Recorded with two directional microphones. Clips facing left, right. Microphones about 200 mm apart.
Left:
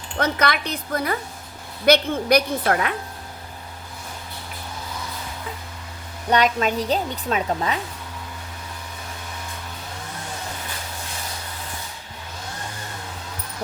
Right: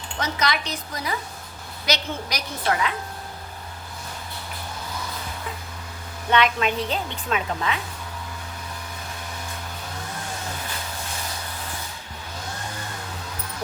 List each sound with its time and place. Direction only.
0.2 s a woman's voice: 55° left (ahead or behind)
6.3 s a woman's voice: 40° left (ahead or behind)